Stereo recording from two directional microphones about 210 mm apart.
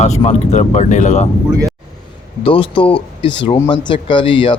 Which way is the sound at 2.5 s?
25° left (ahead or behind).